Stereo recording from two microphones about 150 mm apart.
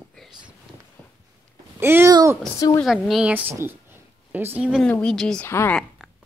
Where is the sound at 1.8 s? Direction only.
15° right (ahead or behind).